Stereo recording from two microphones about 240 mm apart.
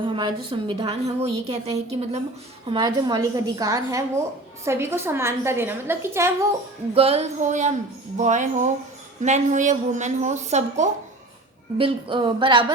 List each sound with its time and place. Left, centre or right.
0.0 s a woman's voice: right
6.9 s a woman's voice: right